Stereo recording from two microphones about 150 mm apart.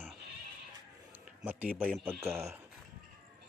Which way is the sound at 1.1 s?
10° right (ahead or behind).